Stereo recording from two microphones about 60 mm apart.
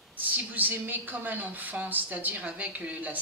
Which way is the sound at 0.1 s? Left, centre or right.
Right.